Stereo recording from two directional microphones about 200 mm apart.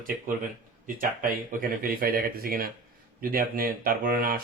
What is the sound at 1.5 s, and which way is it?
Speech, 45° right (ahead or behind).